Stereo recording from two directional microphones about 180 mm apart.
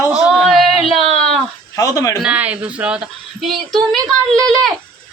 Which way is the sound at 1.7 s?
15° left (ahead or behind).